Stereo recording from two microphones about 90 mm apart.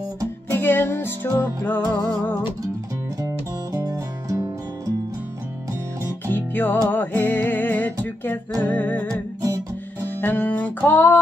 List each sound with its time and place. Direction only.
0.5 s music: 25° left (ahead or behind)
3.2 s music: 40° right (ahead or behind)
5.7 s music: 35° right (ahead or behind)
6.3 s music: 20° left (ahead or behind)
9.1 s music: 40° right (ahead or behind)
10.2 s a sound: 20° left (ahead or behind)